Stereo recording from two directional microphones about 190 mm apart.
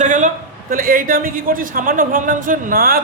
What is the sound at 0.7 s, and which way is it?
A woman's voice, 45° right (ahead or behind).